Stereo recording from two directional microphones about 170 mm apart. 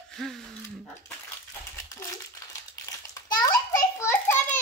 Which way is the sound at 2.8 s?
20° left (ahead or behind).